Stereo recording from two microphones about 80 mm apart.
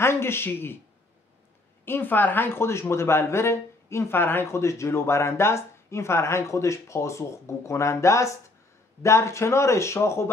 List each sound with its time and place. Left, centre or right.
0.0 s a man's voice: left
1.9 s speech: left